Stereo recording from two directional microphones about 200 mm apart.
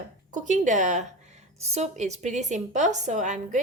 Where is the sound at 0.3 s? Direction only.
40° right (ahead or behind).